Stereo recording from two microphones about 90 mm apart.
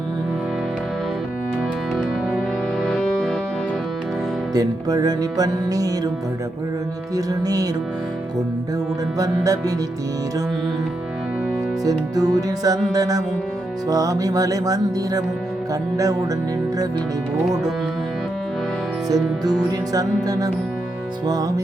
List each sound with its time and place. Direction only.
2.8 s music: 5° left (ahead or behind)
4.5 s music: 45° right (ahead or behind)
7.4 s music: 45° right (ahead or behind)
9.1 s music: 40° right (ahead or behind)
11.9 s music: 45° right (ahead or behind)
19.0 s music: 45° right (ahead or behind)